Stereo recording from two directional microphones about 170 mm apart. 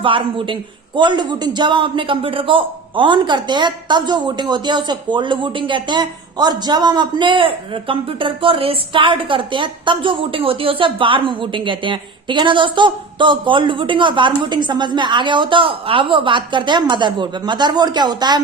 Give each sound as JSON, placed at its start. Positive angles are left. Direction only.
{"t": 0.0, "sound": "a man's voice", "side_deg": -30}